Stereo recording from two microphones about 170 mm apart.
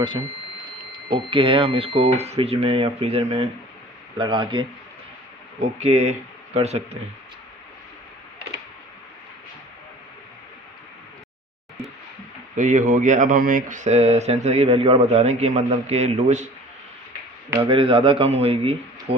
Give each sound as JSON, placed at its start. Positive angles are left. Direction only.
{"t": 1.1, "sound": "speech", "side_deg": -30}
{"t": 4.2, "sound": "speech", "side_deg": -30}
{"t": 5.5, "sound": "speech", "side_deg": -40}
{"t": 12.5, "sound": "speech", "side_deg": -45}
{"t": 17.6, "sound": "speech", "side_deg": -30}